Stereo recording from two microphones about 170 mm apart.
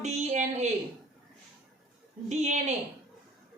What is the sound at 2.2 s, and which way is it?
Speech, 40° right (ahead or behind).